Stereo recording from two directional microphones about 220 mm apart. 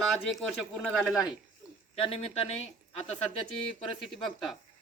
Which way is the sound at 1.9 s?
25° left (ahead or behind).